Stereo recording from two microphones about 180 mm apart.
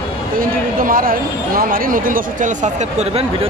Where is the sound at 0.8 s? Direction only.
50° right (ahead or behind).